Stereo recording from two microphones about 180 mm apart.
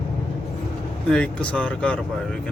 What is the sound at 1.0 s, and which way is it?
Speech, 5° left (ahead or behind).